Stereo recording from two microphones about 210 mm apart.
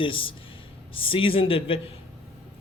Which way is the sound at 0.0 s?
25° left (ahead or behind).